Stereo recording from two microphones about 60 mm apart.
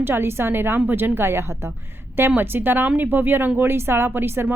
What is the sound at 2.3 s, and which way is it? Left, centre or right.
A woman's voice, right.